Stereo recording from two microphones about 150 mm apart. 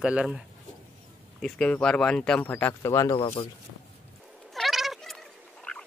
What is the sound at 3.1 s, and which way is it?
Speech, 35° left (ahead or behind).